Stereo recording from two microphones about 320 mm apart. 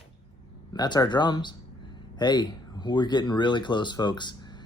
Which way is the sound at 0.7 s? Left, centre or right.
Centre.